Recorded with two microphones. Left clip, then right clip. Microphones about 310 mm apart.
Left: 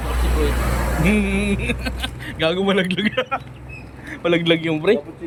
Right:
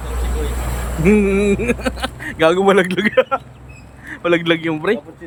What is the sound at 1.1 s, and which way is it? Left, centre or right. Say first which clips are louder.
A man's voice: right 9 dB; centre.